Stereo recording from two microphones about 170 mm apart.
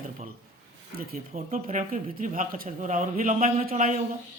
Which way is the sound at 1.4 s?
45° right (ahead or behind).